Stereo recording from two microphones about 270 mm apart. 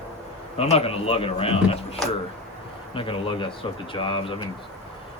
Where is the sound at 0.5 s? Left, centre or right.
Left.